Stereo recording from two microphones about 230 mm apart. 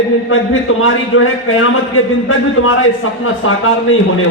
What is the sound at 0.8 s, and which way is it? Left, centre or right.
A man's voice, left.